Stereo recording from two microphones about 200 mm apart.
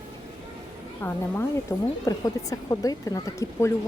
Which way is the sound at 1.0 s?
10° left (ahead or behind).